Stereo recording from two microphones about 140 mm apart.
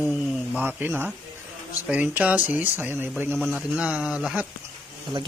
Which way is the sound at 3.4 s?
Centre (ahead or behind).